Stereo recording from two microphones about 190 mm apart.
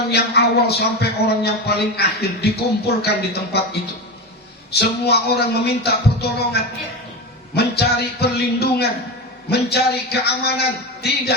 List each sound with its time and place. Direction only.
0.1 s a man's voice: 60° left (ahead or behind)
4.7 s a man's voice: 60° left (ahead or behind)